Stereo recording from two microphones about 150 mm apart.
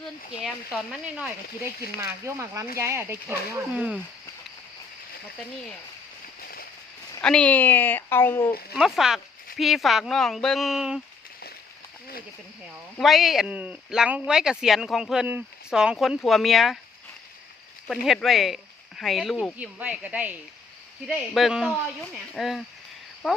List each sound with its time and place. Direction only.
0.4 s speech: 5° right (ahead or behind)
2.2 s speech: 20° right (ahead or behind)
7.2 s speech: 5° left (ahead or behind)
8.7 s speech: 5° right (ahead or behind)
13.0 s speech: centre (ahead or behind)
17.8 s speech: centre (ahead or behind)